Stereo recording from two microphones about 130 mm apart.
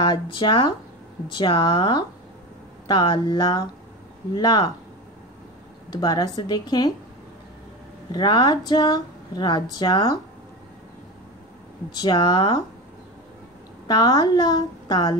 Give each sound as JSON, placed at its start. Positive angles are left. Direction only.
{"t": 0.0, "sound": "speech", "side_deg": 35}
{"t": 5.9, "sound": "speech", "side_deg": 30}
{"t": 8.1, "sound": "speech", "side_deg": 35}
{"t": 11.9, "sound": "speech", "side_deg": 35}
{"t": 13.8, "sound": "speech", "side_deg": 30}